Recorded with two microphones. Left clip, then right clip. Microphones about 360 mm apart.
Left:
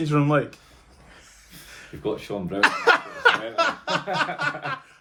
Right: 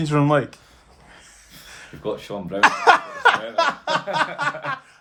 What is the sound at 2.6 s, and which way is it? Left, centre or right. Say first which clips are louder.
Laughter: right 4 dB; centre.